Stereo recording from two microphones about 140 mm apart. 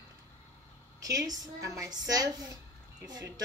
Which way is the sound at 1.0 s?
25° right (ahead or behind).